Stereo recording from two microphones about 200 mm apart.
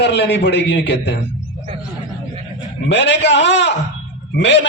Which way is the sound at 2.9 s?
60° left (ahead or behind).